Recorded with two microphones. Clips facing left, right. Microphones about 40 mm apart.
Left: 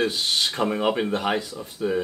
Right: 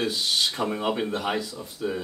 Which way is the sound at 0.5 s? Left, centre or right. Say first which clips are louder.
Left 4 dB; left.